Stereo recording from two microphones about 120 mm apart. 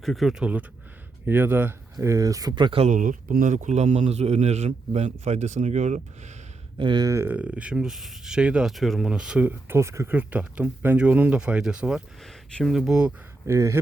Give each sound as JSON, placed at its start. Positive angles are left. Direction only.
{"t": 0.0, "sound": "speech", "side_deg": 0}
{"t": 3.4, "sound": "a man's voice", "side_deg": -90}
{"t": 6.7, "sound": "speech", "side_deg": -40}
{"t": 7.3, "sound": "speech", "side_deg": -10}
{"t": 12.2, "sound": "speech", "side_deg": 5}
{"t": 13.5, "sound": "speech", "side_deg": -25}